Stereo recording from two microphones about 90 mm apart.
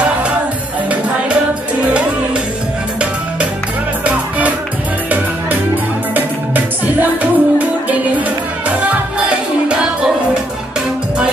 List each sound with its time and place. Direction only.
4.0 s music: 15° right (ahead or behind)
6.1 s music: 20° right (ahead or behind)